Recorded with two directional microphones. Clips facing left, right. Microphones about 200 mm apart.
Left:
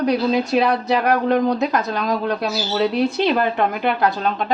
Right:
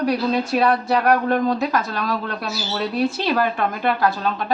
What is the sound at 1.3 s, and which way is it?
A woman's voice, 20° left (ahead or behind).